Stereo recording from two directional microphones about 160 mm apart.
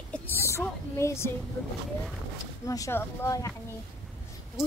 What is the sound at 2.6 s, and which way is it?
Speech, 20° left (ahead or behind).